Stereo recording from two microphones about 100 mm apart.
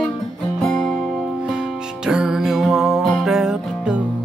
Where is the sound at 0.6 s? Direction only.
Centre (ahead or behind).